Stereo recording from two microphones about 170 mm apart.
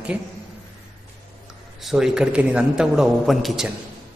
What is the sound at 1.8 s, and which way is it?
A man's voice, 5° right (ahead or behind).